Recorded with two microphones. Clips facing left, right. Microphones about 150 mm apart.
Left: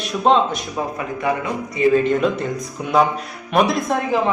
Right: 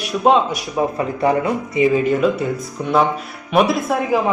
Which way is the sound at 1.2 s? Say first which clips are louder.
Right 5 dB; 35° right (ahead or behind).